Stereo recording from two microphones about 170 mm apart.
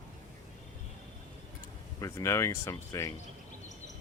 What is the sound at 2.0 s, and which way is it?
Speech, 20° left (ahead or behind).